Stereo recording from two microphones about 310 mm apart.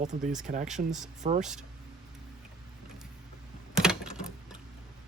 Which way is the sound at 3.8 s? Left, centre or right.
Centre.